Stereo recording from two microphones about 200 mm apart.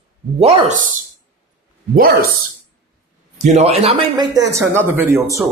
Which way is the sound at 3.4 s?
35° right (ahead or behind).